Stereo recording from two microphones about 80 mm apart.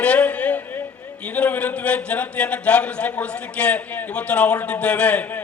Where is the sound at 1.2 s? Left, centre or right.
Centre.